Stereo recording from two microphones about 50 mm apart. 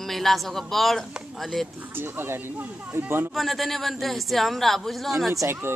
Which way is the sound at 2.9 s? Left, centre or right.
Right.